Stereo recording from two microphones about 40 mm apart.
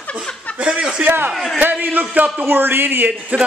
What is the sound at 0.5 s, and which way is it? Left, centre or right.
Speech, right.